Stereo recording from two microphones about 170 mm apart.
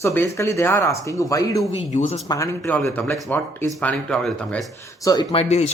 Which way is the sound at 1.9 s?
45° left (ahead or behind).